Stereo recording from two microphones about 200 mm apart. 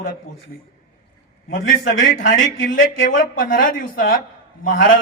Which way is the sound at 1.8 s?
70° left (ahead or behind).